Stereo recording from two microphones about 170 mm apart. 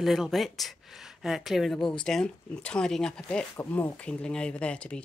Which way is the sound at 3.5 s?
15° left (ahead or behind).